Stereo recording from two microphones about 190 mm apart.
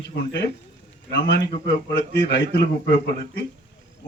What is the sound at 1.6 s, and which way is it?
A man's voice, 70° left (ahead or behind).